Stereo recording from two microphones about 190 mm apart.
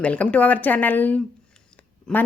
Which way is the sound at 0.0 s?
5° left (ahead or behind).